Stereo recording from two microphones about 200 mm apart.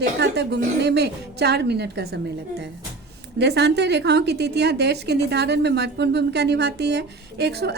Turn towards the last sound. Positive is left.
turn(degrees=-55)  # may be behind; listen again after turning